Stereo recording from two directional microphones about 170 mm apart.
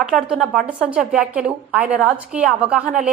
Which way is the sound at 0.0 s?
5° right (ahead or behind).